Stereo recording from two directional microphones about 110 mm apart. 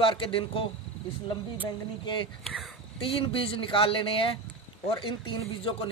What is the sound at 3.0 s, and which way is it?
Speech, 55° left (ahead or behind).